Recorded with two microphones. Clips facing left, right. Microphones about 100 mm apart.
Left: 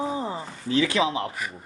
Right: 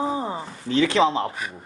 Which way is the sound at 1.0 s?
70° right (ahead or behind).